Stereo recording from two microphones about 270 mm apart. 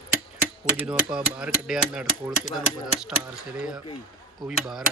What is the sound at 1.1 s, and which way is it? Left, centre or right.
Speech, centre.